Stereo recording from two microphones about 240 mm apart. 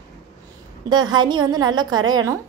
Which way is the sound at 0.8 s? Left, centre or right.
Centre.